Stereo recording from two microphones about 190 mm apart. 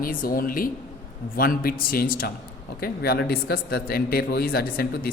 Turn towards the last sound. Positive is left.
turn(degrees=55)  # may be behind; listen again after turning